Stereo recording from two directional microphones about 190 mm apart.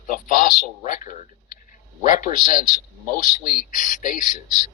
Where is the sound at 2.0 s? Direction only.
45° left (ahead or behind).